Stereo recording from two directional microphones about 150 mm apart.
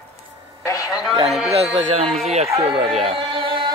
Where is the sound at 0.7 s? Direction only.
25° left (ahead or behind).